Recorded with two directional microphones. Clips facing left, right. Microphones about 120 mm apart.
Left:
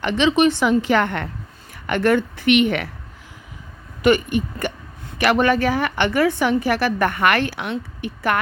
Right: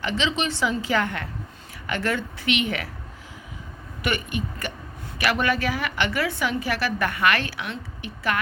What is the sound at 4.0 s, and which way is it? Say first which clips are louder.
A woman's voice: left 10 dB; 40° left (ahead or behind).